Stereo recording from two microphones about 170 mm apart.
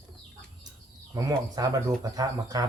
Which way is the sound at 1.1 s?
20° right (ahead or behind).